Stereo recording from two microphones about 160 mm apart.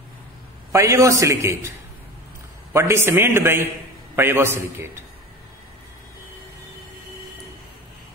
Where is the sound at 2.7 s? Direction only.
15° right (ahead or behind).